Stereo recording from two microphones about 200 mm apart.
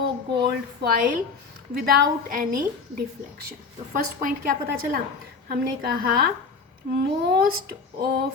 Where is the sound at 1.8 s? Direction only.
50° right (ahead or behind).